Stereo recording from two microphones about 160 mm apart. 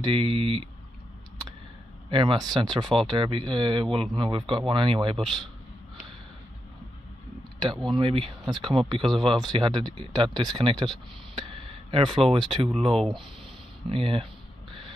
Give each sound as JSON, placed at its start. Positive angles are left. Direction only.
{"t": 0.0, "sound": "speech", "side_deg": -35}
{"t": 2.0, "sound": "speech", "side_deg": -30}
{"t": 5.1, "sound": "speech", "side_deg": 0}
{"t": 7.9, "sound": "speech", "side_deg": -35}